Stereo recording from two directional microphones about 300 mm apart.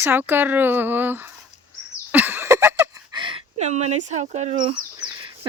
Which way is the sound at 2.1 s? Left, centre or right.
Centre.